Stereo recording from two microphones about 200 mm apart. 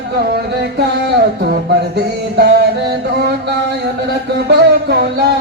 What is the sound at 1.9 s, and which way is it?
Music, 55° right (ahead or behind).